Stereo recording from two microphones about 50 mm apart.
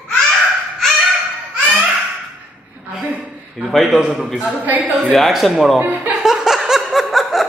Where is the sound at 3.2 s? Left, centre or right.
Centre.